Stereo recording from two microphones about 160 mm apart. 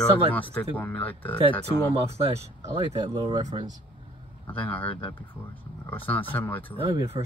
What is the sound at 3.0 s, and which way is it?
Speech, 25° right (ahead or behind).